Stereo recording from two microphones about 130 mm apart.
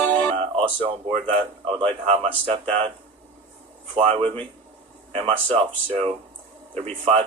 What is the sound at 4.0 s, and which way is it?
Speech, 45° right (ahead or behind).